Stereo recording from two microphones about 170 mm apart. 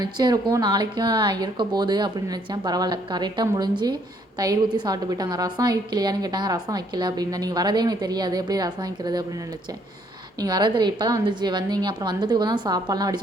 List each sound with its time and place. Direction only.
0.0 s a woman's voice: 25° right (ahead or behind)
10.3 s a woman's voice: 25° right (ahead or behind)